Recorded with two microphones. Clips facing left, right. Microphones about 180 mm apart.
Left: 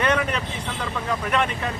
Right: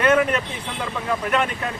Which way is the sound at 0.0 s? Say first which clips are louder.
Right 5 dB; 5° right (ahead or behind).